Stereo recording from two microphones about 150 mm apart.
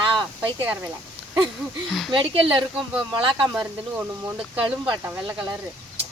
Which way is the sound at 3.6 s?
10° right (ahead or behind).